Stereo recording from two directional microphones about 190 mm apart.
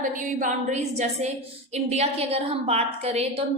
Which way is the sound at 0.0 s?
45° right (ahead or behind).